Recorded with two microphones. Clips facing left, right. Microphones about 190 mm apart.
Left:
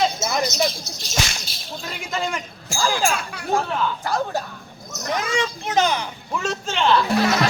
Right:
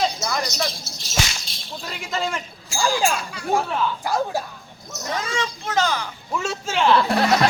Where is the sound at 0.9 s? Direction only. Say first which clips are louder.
Even; centre (ahead or behind).